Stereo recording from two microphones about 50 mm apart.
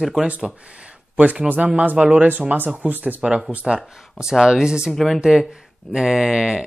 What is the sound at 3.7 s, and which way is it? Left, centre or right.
Speech, centre.